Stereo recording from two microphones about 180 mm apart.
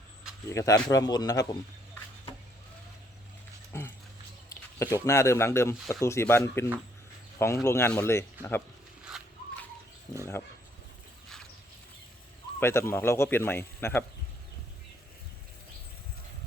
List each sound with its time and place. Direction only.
0.5 s speech: 20° left (ahead or behind)
3.7 s dog: 15° left (ahead or behind)
4.8 s speech: 20° left (ahead or behind)
12.5 s speech: 15° left (ahead or behind)